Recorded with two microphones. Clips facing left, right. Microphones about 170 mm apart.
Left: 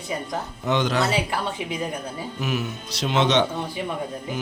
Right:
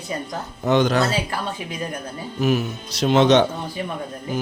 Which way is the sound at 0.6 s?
45° right (ahead or behind).